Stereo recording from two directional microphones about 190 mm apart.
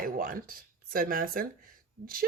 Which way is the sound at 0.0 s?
50° right (ahead or behind).